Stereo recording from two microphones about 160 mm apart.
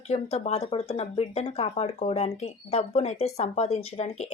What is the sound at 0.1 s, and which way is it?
Speech, 45° left (ahead or behind).